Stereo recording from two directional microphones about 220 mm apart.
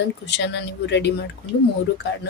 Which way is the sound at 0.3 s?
50° left (ahead or behind).